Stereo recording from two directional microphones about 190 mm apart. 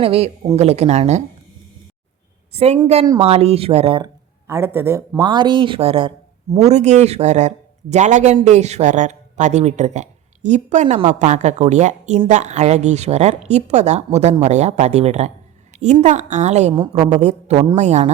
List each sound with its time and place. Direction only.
0.0 s speech: 30° right (ahead or behind)
2.5 s a woman's voice: 35° right (ahead or behind)
4.4 s speech: 15° right (ahead or behind); by 18.1 s 35° right (ahead or behind)